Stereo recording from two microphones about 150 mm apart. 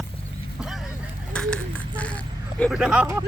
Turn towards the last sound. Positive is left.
turn(degrees=-5)  # may be behind; listen again after turning